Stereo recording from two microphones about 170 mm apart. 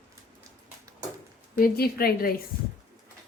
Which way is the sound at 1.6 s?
65° left (ahead or behind).